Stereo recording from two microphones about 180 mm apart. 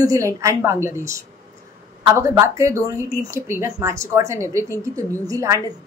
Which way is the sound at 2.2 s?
15° right (ahead or behind).